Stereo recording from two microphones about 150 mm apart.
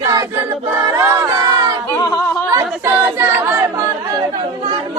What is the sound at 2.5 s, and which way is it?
Chatter, 15° right (ahead or behind).